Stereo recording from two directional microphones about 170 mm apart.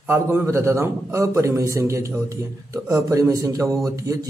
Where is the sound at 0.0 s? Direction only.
15° right (ahead or behind).